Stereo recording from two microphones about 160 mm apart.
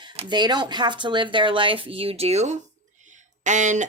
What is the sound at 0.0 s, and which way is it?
Speech, 30° right (ahead or behind).